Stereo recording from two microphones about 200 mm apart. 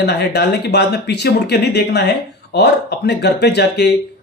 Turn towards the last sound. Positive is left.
turn(degrees=55)  # may be behind; listen again after turning